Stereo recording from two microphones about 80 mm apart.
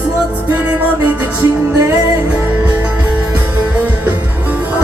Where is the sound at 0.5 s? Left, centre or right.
Right.